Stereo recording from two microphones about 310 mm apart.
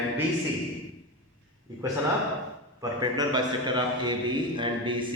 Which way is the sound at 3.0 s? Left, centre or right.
Centre.